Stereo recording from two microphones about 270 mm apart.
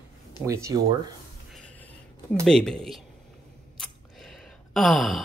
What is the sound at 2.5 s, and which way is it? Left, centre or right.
Speech, centre.